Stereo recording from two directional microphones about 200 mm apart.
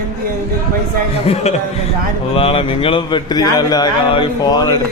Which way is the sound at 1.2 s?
30° left (ahead or behind).